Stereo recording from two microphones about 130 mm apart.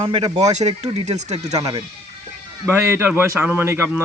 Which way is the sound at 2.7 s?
20° right (ahead or behind).